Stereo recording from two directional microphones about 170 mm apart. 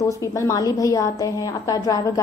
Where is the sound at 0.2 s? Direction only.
20° left (ahead or behind).